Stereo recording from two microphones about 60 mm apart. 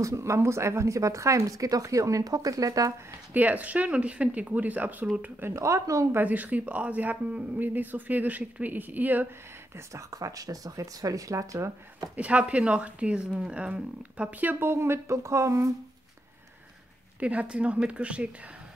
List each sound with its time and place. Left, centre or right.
0.0 s speech: right
3.3 s speech: right
5.5 s a woman's voice: right
6.1 s speech: right
10.1 s speech: right
12.2 s speech: right
14.5 s speech: right
17.2 s speech: right